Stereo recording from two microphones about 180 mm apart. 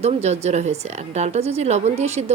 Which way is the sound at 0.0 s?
35° right (ahead or behind).